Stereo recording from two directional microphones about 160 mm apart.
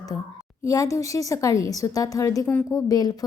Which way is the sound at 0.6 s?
20° left (ahead or behind).